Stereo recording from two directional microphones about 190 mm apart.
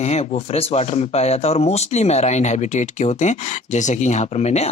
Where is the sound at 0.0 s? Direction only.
35° left (ahead or behind).